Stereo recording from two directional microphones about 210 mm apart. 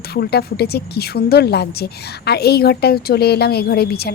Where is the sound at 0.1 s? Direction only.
50° left (ahead or behind).